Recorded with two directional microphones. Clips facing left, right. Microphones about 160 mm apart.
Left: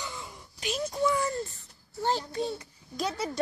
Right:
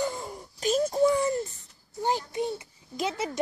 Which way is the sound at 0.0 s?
45° right (ahead or behind).